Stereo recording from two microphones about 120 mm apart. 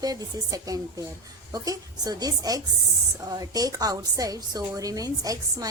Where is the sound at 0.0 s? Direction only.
30° right (ahead or behind).